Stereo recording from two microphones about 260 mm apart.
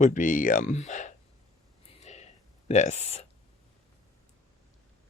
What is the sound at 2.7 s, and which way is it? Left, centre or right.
Speech, left.